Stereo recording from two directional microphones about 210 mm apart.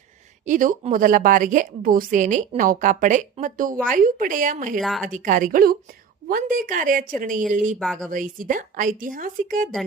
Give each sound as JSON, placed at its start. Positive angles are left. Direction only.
{"t": 0.4, "sound": "a woman's voice", "side_deg": -40}
{"t": 4.8, "sound": "speech", "side_deg": 0}
{"t": 5.0, "sound": "a woman's voice", "side_deg": -40}
{"t": 7.8, "sound": "speech", "side_deg": 5}
{"t": 8.1, "sound": "a woman's voice", "side_deg": -40}